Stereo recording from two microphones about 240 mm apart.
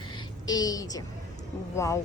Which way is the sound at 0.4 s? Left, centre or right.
Centre.